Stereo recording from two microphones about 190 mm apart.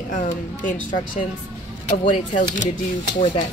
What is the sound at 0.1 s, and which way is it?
Speech, 40° left (ahead or behind).